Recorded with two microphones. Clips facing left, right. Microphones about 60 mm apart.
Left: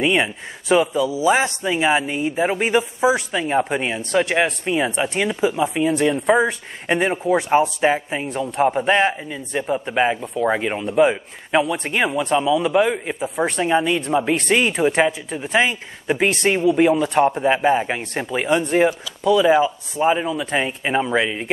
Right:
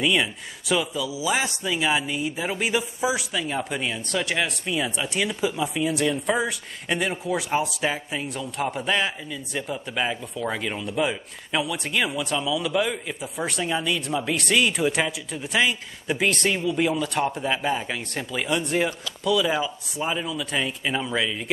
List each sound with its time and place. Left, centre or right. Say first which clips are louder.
0.0 s speech: left 4 dB; left